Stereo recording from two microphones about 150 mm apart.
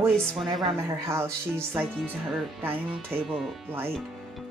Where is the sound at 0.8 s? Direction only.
20° right (ahead or behind).